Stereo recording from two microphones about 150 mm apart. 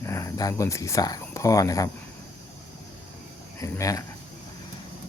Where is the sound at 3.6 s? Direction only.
20° left (ahead or behind).